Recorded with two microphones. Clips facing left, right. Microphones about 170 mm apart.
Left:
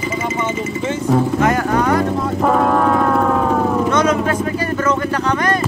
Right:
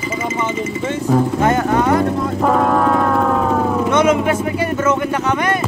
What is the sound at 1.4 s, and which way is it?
Speech, 20° right (ahead or behind).